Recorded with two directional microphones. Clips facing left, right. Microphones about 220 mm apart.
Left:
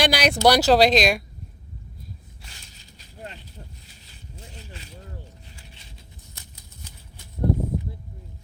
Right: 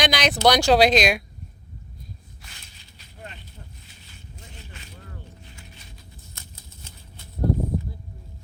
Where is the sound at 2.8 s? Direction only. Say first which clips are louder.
Left 3 dB; 35° left (ahead or behind).